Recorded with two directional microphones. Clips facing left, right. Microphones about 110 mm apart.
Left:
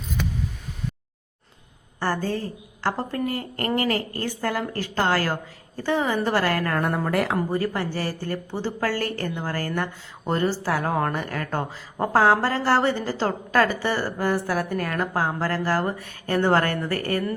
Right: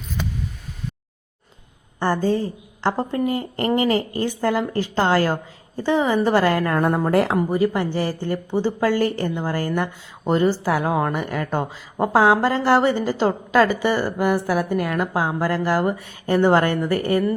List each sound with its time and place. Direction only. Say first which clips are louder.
2.0 s a woman's voice: right 5 dB; 20° right (ahead or behind)
7.3 s a woman's voice: right 5 dB; 15° right (ahead or behind)